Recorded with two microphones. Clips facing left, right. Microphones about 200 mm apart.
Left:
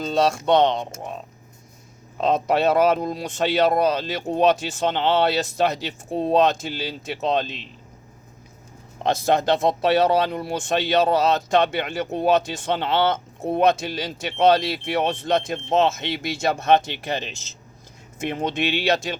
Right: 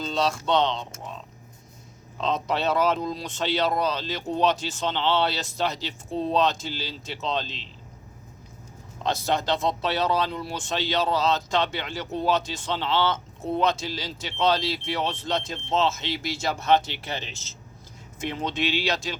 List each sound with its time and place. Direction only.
0.0 s speech: 50° left (ahead or behind)
2.1 s speech: 55° left (ahead or behind)
9.0 s speech: 55° left (ahead or behind)
16.8 s speech: 15° left (ahead or behind)
18.3 s speech: 50° left (ahead or behind)